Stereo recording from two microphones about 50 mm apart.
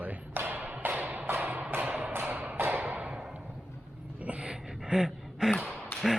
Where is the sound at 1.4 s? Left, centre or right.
Right.